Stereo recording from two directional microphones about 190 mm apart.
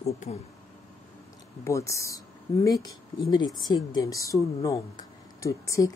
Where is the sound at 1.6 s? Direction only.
15° left (ahead or behind).